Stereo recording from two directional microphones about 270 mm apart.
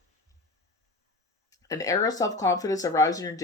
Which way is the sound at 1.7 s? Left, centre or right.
Centre.